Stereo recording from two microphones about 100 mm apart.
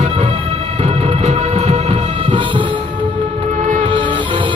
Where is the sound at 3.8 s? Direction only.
55° right (ahead or behind).